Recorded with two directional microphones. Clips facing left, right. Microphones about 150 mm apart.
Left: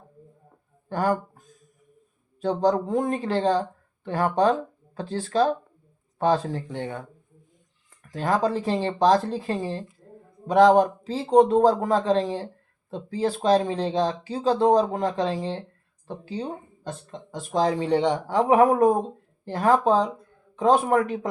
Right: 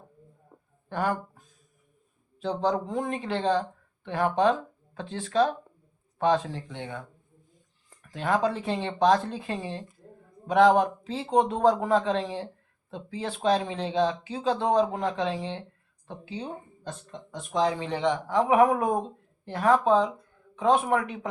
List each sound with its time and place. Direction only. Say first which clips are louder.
0.9 s speech: left 4 dB; 40° left (ahead or behind)
2.4 s speech: left 5 dB; 40° left (ahead or behind)
8.1 s speech: left 2 dB; 35° left (ahead or behind)